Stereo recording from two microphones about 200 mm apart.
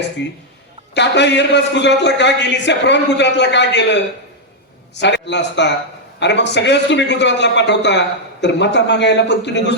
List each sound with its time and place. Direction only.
0.2 s a man's voice: 60° left (ahead or behind)